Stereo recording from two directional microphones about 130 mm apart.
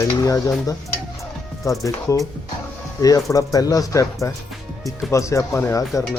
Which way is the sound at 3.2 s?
25° left (ahead or behind).